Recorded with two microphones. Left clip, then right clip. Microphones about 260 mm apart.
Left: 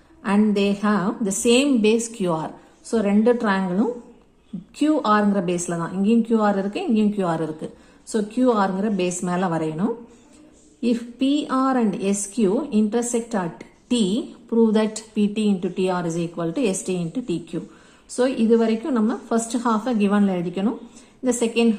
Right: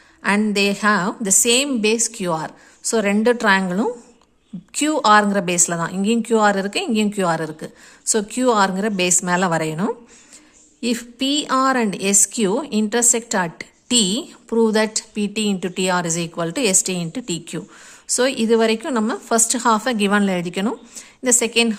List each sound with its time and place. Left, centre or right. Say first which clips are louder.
0.2 s a woman's voice: right 3 dB; right